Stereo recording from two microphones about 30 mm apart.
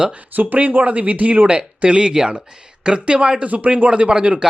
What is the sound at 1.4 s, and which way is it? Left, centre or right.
Speech, right.